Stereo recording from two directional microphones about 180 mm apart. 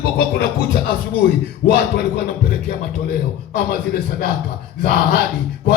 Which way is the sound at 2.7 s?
55° left (ahead or behind).